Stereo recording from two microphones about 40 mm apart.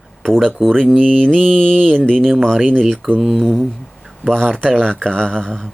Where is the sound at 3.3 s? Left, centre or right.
Centre.